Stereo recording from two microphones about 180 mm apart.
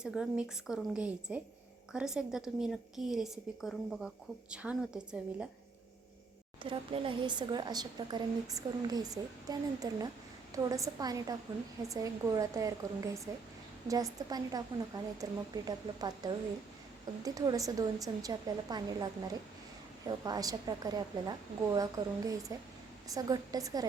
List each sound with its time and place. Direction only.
0.0 s a woman's voice: 5° right (ahead or behind)
6.6 s a woman's voice: 30° right (ahead or behind)